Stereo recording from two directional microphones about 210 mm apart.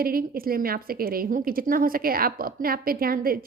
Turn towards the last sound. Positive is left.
turn(degrees=-45)  # may be behind; listen again after turning